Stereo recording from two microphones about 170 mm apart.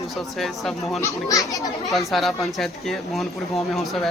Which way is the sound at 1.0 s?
20° left (ahead or behind).